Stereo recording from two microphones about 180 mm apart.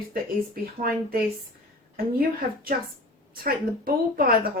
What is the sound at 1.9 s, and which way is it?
Speech, 55° right (ahead or behind).